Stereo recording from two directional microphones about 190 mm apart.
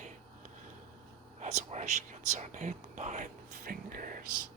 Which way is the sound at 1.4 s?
40° right (ahead or behind).